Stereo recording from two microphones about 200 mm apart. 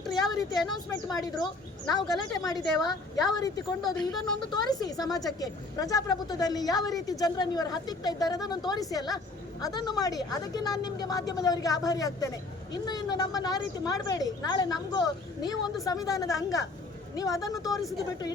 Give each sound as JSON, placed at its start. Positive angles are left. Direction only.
{"t": 0.1, "sound": "a woman's voice", "side_deg": 20}
{"t": 2.8, "sound": "a woman's voice", "side_deg": 0}
{"t": 3.9, "sound": "a woman's voice", "side_deg": 20}
{"t": 17.7, "sound": "a woman's voice", "side_deg": 0}